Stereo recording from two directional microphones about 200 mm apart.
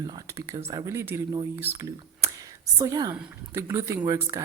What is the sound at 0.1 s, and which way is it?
Speech, 20° right (ahead or behind).